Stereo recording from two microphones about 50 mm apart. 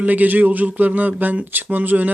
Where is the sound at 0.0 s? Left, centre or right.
Right.